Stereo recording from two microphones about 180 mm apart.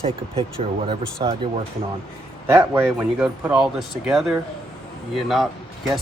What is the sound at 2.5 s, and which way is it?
A man's voice, 15° right (ahead or behind).